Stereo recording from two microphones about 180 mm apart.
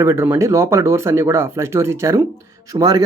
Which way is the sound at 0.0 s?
15° right (ahead or behind).